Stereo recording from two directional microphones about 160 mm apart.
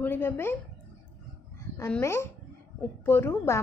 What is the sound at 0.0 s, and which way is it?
Speech, 15° left (ahead or behind).